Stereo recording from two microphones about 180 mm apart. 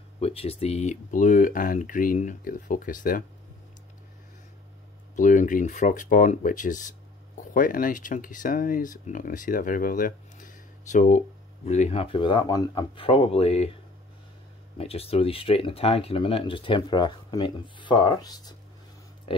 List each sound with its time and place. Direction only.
0.2 s speech: 35° left (ahead or behind)
5.1 s speech: 45° left (ahead or behind)
14.8 s speech: 35° left (ahead or behind)